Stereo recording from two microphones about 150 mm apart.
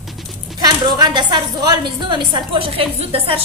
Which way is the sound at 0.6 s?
30° right (ahead or behind).